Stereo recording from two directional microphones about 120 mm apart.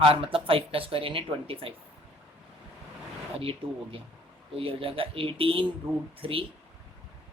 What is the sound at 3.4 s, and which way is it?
Speech, 50° right (ahead or behind).